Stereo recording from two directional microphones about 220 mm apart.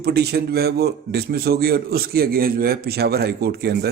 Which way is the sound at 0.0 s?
45° right (ahead or behind).